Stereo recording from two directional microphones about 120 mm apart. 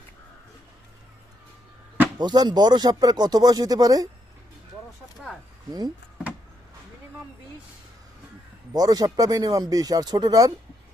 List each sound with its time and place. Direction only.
2.1 s speech: 35° right (ahead or behind)
8.7 s speech: 30° right (ahead or behind)